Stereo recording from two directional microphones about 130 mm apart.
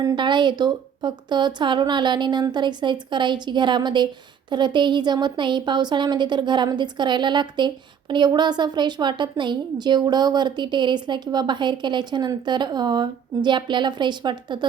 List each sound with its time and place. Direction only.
0.0 s a woman's voice: 30° right (ahead or behind)